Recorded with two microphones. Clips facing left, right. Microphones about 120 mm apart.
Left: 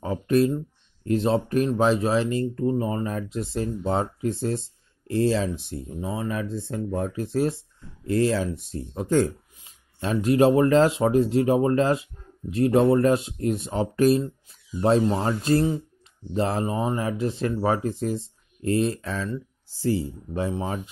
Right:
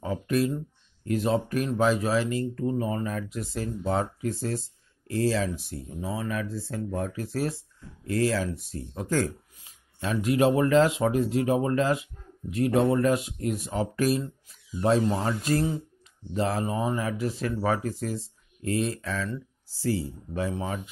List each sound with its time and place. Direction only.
0.0 s speech: 30° left (ahead or behind)